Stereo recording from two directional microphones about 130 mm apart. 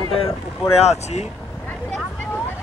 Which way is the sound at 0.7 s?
55° left (ahead or behind).